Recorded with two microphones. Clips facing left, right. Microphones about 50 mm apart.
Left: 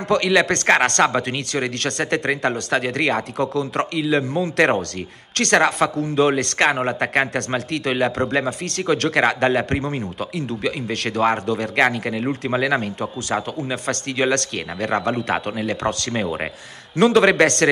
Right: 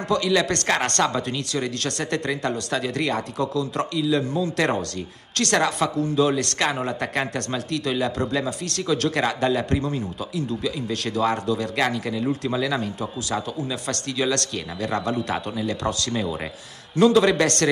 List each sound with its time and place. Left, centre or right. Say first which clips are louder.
0.1 s a man's voice: left 4 dB; left
0.5 s a man's voice: left 6 dB; left
1.9 s a man's voice: left 4 dB; left
8.5 s speech: left 3 dB; left
8.8 s a man's voice: left 4 dB; left
16.9 s a man's voice: left 2 dB; left